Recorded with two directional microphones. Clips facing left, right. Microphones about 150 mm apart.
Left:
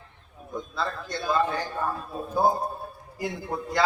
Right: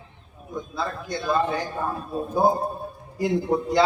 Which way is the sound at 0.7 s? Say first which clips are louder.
Right 2 dB; 10° right (ahead or behind).